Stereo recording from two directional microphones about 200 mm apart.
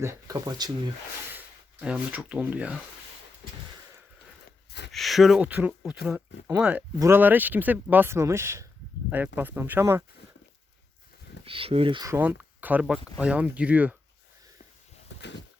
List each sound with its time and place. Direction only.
0.0 s speech: 15° right (ahead or behind)
1.4 s speech: 5° right (ahead or behind)
4.9 s speech: centre (ahead or behind)
11.4 s speech: 30° right (ahead or behind); by 13.9 s 5° right (ahead or behind)
15.2 s a sound: 60° left (ahead or behind)